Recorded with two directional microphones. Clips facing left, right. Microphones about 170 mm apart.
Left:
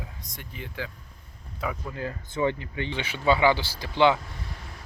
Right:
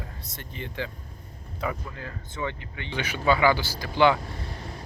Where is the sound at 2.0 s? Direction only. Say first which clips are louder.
Left 6 dB; 35° left (ahead or behind).